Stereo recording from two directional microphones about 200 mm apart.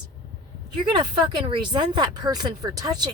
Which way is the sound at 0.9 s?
25° right (ahead or behind).